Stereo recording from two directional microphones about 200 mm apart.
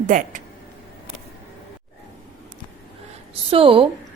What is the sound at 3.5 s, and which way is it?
Speech, 25° right (ahead or behind).